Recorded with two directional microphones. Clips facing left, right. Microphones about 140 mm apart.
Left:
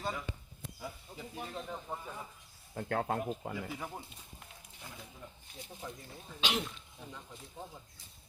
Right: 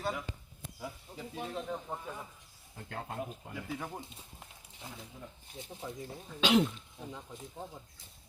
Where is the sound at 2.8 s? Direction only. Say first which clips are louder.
Left 6 dB; 90° left.